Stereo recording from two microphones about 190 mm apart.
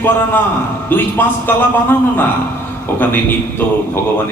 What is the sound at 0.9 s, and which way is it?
A man's voice, 10° left (ahead or behind).